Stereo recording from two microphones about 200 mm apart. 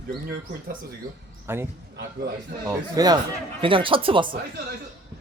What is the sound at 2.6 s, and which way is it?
Speech, 20° right (ahead or behind).